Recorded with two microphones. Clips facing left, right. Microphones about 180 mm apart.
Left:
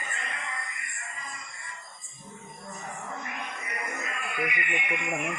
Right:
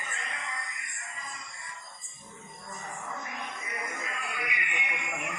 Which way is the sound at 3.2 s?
70° left (ahead or behind).